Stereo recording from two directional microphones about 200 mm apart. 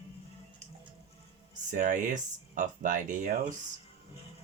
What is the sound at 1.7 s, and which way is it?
Speech, 40° right (ahead or behind).